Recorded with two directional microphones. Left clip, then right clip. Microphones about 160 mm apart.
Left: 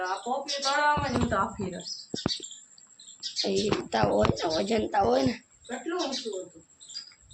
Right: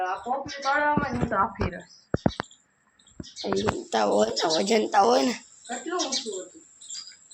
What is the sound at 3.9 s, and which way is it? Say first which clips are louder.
Speech: right 3 dB; 40° right (ahead or behind).